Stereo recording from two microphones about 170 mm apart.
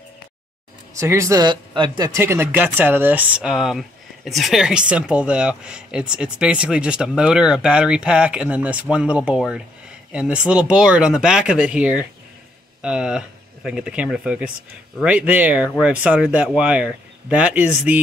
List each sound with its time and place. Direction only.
0.9 s speech: 15° right (ahead or behind)